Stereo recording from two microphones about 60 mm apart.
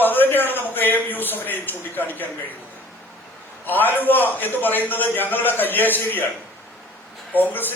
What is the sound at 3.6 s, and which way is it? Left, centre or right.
A man's voice, left.